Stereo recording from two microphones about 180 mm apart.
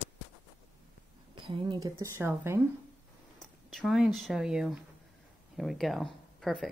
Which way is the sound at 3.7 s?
Centre (ahead or behind).